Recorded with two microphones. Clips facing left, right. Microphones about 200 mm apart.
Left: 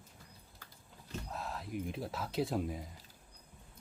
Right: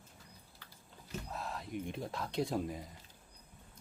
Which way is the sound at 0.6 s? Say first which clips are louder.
Left 3 dB; 45° left (ahead or behind).